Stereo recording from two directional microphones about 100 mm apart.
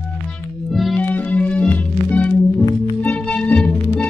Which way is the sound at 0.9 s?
15° left (ahead or behind).